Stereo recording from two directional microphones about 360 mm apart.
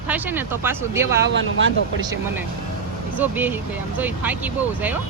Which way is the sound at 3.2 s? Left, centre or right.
Centre.